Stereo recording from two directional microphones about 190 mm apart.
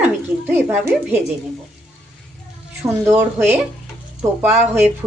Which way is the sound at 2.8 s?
10° right (ahead or behind).